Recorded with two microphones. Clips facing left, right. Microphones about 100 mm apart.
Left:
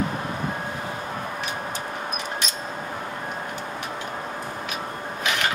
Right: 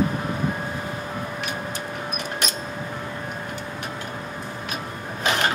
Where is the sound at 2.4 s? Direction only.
55° right (ahead or behind).